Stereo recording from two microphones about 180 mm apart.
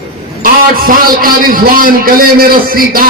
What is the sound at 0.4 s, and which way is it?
A man's voice, 50° right (ahead or behind).